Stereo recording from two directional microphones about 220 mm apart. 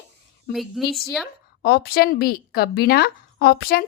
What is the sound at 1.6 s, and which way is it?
A woman's voice, 45° left (ahead or behind).